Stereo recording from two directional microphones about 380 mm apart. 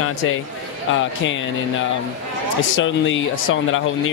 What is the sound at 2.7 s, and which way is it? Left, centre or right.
Speech, left.